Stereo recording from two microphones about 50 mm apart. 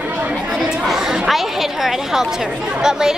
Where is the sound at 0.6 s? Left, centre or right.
Centre.